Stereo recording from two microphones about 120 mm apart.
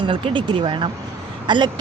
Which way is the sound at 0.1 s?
45° right (ahead or behind).